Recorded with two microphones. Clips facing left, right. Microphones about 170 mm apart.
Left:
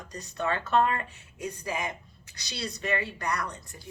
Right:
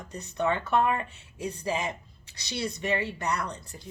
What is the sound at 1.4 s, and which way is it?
Speech, 30° right (ahead or behind).